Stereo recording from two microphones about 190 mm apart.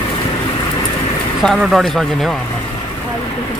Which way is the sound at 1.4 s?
Centre (ahead or behind).